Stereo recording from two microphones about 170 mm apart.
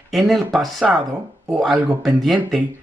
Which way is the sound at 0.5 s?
Centre (ahead or behind).